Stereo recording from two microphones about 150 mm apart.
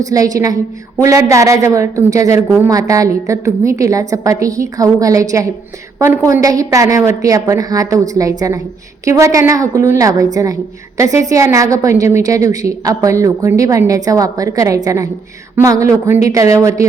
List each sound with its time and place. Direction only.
0.0 s a woman's voice: 25° right (ahead or behind)